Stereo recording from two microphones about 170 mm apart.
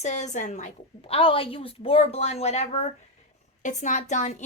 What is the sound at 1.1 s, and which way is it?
A woman's voice, 30° left (ahead or behind).